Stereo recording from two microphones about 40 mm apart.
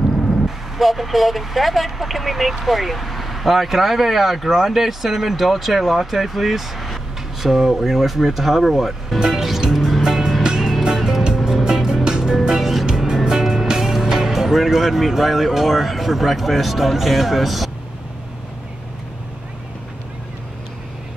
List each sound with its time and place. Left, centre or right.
0.7 s speech: centre
9.4 s music: centre
11.3 s music: centre
12.4 s music: centre
12.8 s music: centre
14.0 s speech: centre